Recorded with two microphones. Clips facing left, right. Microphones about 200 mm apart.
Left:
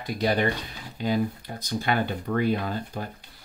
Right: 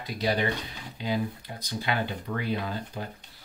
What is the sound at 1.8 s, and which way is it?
Speech, 50° left (ahead or behind).